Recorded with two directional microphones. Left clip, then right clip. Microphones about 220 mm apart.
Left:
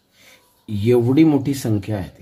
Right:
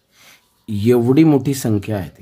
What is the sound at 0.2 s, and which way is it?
Speech, 40° right (ahead or behind).